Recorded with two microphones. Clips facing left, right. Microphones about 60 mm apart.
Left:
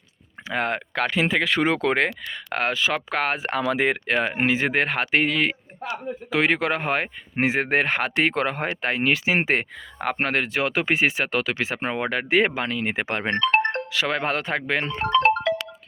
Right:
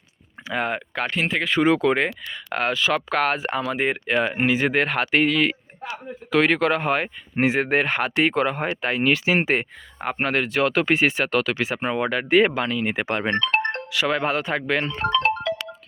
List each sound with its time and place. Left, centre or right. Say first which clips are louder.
0.5 s speech: even; left
3.5 s speech: left 1 dB; left
6.3 s speech: right 3 dB; centre; by 10.5 s left
10.5 s speech: right 3 dB; left
11.5 s speech: right 2 dB; left
12.6 s speech: right 2 dB; left
14.7 s speech: left 1 dB; left